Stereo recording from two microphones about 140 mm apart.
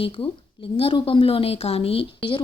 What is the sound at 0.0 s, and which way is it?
A woman's voice, 40° left (ahead or behind).